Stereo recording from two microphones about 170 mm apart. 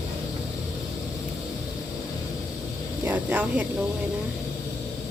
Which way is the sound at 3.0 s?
10° right (ahead or behind).